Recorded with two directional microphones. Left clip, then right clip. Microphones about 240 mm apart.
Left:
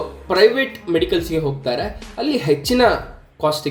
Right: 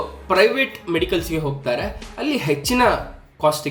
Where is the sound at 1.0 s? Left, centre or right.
Right.